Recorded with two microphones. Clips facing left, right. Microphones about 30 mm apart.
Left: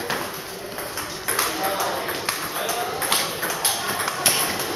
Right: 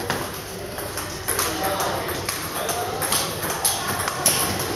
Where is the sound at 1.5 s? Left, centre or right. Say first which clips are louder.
Even; centre.